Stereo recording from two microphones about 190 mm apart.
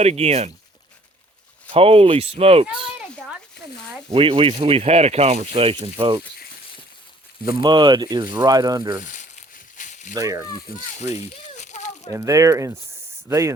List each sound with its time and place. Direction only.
0.0 s speech: 35° right (ahead or behind)
1.7 s speech: 30° right (ahead or behind)
4.1 s speech: 30° right (ahead or behind)
7.6 s speech: 25° right (ahead or behind)
9.0 s speech: 45° left (ahead or behind)
9.7 s a sound: 40° left (ahead or behind)
10.2 s speech: 15° right (ahead or behind)
11.0 s a sound: 35° left (ahead or behind)
12.1 s speech: 15° right (ahead or behind)